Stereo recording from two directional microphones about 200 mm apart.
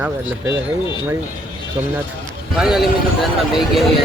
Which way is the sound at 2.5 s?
Centre (ahead or behind).